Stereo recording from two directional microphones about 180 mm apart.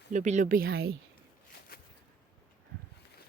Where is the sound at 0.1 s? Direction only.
45° right (ahead or behind).